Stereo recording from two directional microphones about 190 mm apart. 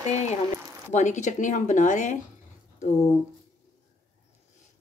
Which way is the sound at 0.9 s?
40° left (ahead or behind).